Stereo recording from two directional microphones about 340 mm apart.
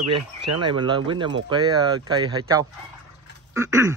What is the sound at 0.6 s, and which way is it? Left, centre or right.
Speech, centre.